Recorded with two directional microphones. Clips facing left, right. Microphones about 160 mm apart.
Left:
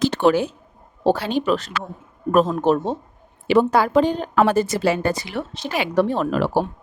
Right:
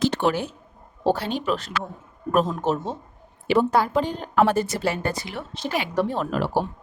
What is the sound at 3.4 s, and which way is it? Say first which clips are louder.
A woman's voice: left 3 dB; 90° left.